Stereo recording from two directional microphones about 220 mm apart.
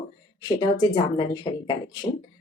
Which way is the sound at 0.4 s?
20° left (ahead or behind).